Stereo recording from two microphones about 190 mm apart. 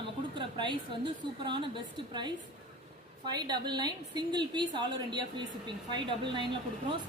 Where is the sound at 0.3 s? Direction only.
25° right (ahead or behind).